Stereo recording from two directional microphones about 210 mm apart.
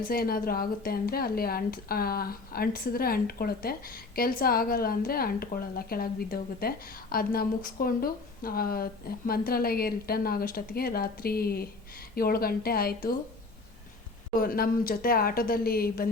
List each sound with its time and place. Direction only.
0.0 s a woman's voice: 45° left (ahead or behind)
14.3 s a woman's voice: 45° left (ahead or behind)